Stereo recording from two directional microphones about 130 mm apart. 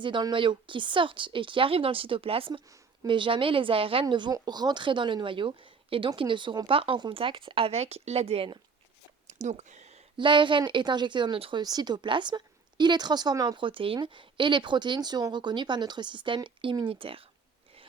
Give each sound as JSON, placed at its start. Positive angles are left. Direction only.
{"t": 0.0, "sound": "a woman's voice", "side_deg": -35}
{"t": 4.0, "sound": "a woman's voice", "side_deg": -35}
{"t": 9.2, "sound": "a sound", "side_deg": -60}
{"t": 10.2, "sound": "a woman's voice", "side_deg": -40}